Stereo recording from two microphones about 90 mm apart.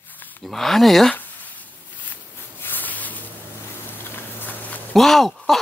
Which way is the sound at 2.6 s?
20° left (ahead or behind).